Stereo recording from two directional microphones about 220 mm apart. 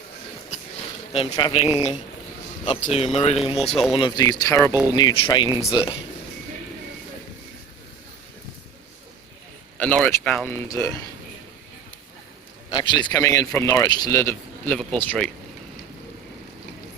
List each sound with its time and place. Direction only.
1.1 s a man's voice: 25° left (ahead or behind)
9.7 s a man's voice: 5° left (ahead or behind)
12.7 s a man's voice: 20° left (ahead or behind)